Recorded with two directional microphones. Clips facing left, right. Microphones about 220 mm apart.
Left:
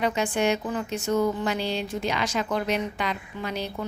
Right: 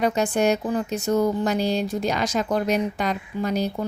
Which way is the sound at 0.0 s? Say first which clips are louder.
Right 4 dB; 40° right (ahead or behind).